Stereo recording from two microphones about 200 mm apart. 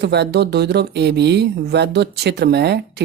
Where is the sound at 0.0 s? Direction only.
55° right (ahead or behind).